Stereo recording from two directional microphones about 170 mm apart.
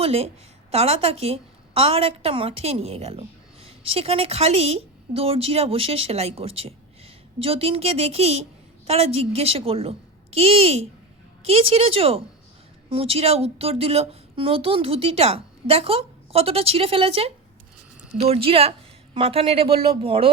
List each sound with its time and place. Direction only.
0.0 s a woman's voice: 35° right (ahead or behind)